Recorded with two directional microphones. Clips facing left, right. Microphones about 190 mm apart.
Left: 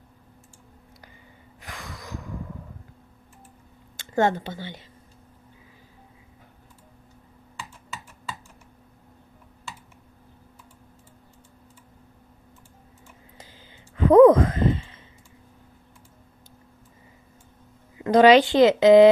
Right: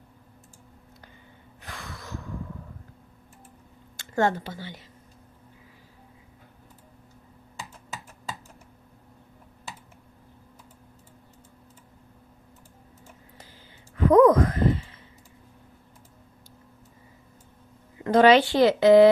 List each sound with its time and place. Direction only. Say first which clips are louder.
1.6 s gasp: left 1 dB; 15° left (ahead or behind)
3.9 s speech: left 2 dB; 20° left (ahead or behind)
13.9 s a sound: left 4 dB; 25° left (ahead or behind)
17.9 s speech: left 2 dB; 15° left (ahead or behind)